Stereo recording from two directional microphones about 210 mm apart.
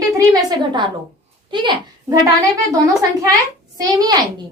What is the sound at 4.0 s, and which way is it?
Speech, 20° right (ahead or behind).